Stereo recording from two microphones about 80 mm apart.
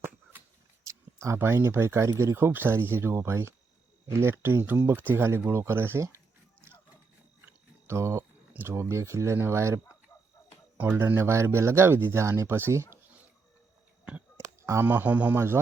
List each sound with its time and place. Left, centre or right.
0.9 s speech: right
7.9 s speech: right
14.8 s speech: right